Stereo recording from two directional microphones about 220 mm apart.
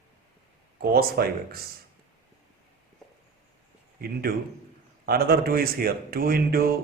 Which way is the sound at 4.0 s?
45° right (ahead or behind).